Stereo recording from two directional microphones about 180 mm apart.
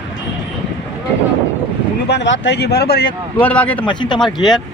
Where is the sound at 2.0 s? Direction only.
80° left; by 3.0 s 60° left (ahead or behind).